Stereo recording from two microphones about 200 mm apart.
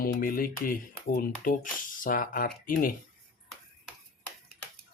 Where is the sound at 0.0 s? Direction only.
45° left (ahead or behind).